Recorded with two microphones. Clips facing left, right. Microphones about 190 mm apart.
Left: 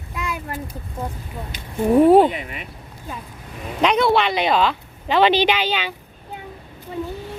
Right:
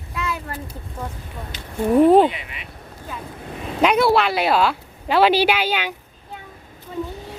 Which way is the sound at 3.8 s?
5° right (ahead or behind).